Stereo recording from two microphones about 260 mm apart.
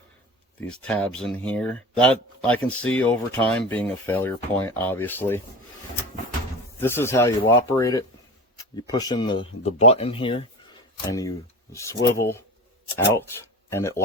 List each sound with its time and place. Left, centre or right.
0.6 s speech: centre
6.7 s speech: centre
13.7 s speech: centre